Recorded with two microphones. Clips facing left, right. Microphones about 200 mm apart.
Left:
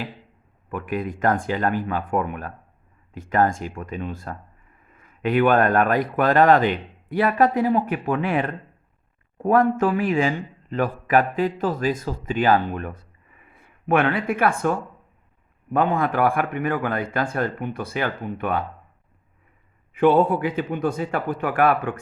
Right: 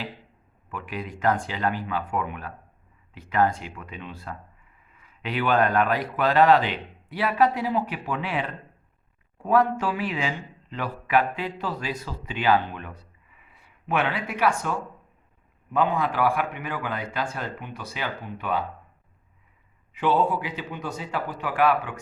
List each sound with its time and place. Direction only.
0.7 s a man's voice: 50° left (ahead or behind)
19.9 s speech: 55° left (ahead or behind)